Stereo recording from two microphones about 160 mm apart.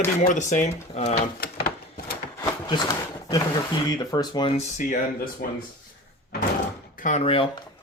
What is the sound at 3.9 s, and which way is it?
Speech, 25° left (ahead or behind).